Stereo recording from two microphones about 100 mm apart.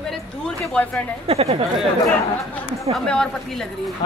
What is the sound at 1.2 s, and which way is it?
Speech, 85° right.